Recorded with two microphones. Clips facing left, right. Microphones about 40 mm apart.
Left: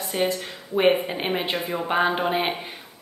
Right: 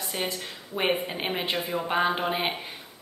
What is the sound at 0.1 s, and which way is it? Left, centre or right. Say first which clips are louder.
Speech: left 8 dB; centre.